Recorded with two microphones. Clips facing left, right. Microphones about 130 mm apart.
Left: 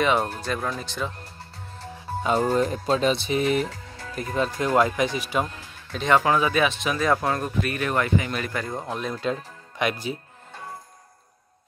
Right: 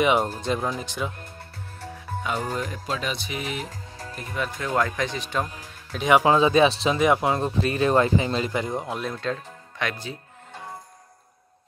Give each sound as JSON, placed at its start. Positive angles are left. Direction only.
{"t": 0.0, "sound": "speech", "side_deg": -15}
{"t": 2.2, "sound": "speech", "side_deg": 40}
{"t": 4.7, "sound": "speech", "side_deg": 15}
{"t": 5.6, "sound": "speech", "side_deg": -10}
{"t": 6.3, "sound": "speech", "side_deg": -25}
{"t": 7.0, "sound": "speech", "side_deg": -20}
{"t": 8.8, "sound": "speech", "side_deg": 0}
{"t": 9.2, "sound": "speech", "side_deg": 15}